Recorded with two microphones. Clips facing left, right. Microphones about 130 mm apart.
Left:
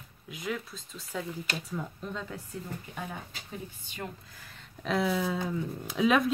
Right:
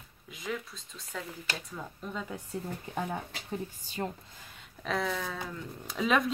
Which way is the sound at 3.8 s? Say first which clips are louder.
Right 4 dB; 35° right (ahead or behind).